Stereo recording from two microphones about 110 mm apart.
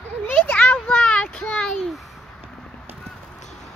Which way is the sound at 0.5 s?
10° left (ahead or behind).